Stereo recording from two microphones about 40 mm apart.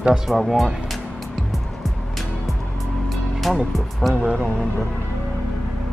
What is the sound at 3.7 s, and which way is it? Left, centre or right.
Speech, centre.